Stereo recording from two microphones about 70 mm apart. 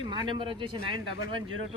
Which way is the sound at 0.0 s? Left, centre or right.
Right.